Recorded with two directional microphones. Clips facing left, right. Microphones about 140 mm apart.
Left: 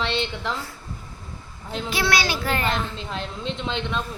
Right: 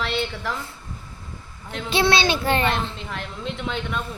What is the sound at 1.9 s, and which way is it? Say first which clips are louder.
Speech: right 5 dB; 25° right (ahead or behind).